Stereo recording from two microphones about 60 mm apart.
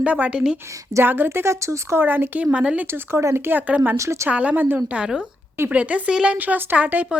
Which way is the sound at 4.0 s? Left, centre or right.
Right.